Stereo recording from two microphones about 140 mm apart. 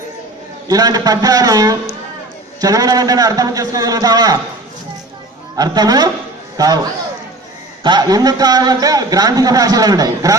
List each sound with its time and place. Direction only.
0.7 s a man's voice: 25° right (ahead or behind)
5.5 s a man's voice: 25° right (ahead or behind)
7.9 s a man's voice: 30° right (ahead or behind)